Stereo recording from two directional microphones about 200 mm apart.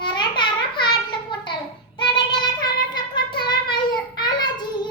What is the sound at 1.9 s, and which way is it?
Child singing, 25° left (ahead or behind).